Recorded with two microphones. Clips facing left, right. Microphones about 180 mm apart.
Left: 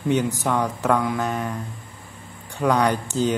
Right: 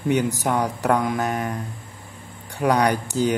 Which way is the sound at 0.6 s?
35° right (ahead or behind).